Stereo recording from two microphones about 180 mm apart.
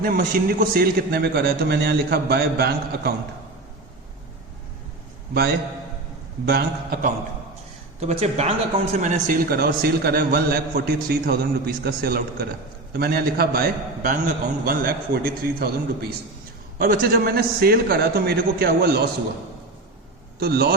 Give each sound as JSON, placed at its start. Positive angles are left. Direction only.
{"t": 0.0, "sound": "speech", "side_deg": -50}
{"t": 6.4, "sound": "speech", "side_deg": -60}
{"t": 7.9, "sound": "speech", "side_deg": -35}
{"t": 20.4, "sound": "speech", "side_deg": -60}